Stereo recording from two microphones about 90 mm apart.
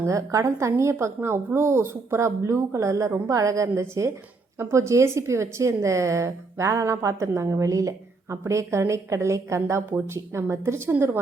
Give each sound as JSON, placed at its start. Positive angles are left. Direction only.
{"t": 0.0, "sound": "a woman's voice", "side_deg": -35}